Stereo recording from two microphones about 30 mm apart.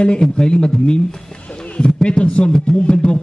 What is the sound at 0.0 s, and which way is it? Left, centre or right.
Speech, left.